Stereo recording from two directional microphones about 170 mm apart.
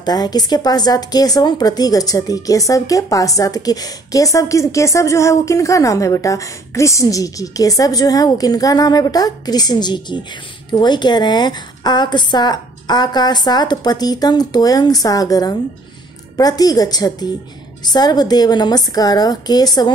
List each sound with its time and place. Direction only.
0.0 s speech: 25° left (ahead or behind)